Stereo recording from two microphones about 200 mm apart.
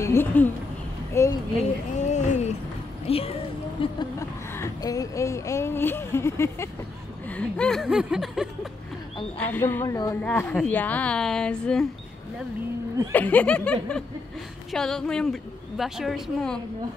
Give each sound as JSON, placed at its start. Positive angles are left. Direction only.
{"t": 0.0, "sound": "speech", "side_deg": 10}
{"t": 2.0, "sound": "a sound", "side_deg": 35}
{"t": 3.1, "sound": "speech", "side_deg": 30}
{"t": 3.8, "sound": "a woman's voice", "side_deg": 20}
{"t": 9.4, "sound": "a woman's voice", "side_deg": 10}
{"t": 13.1, "sound": "a woman's voice", "side_deg": 5}